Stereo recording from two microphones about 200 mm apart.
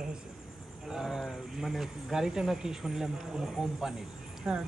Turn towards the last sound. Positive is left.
turn(degrees=-10)  # may be behind; listen again after turning